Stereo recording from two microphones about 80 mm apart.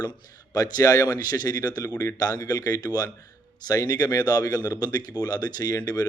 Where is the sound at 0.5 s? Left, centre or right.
Left.